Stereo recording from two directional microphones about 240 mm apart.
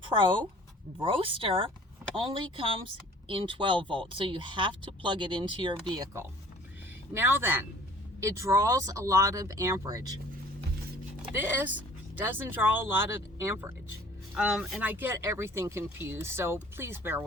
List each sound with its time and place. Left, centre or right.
0.9 s speech: right
11.3 s speech: centre